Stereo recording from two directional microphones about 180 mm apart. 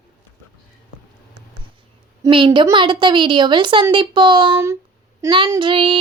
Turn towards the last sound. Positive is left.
turn(degrees=-30)  # may be behind; listen again after turning